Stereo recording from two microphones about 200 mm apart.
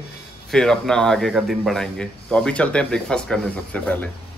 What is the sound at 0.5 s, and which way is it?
Speech, 5° left (ahead or behind).